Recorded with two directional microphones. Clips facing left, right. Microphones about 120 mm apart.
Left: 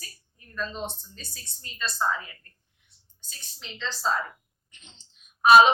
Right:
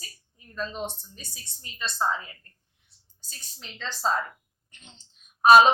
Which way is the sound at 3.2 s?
40° right (ahead or behind).